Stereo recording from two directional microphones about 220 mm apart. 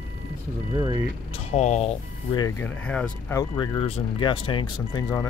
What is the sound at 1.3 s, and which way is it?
Speech, 30° left (ahead or behind).